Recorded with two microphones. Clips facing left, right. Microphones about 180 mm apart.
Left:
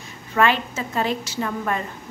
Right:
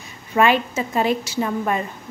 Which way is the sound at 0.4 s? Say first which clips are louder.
Right 3 dB; 15° right (ahead or behind).